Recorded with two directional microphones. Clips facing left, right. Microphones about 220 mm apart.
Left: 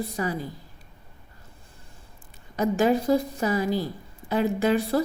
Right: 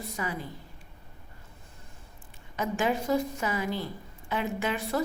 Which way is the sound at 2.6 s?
40° left (ahead or behind).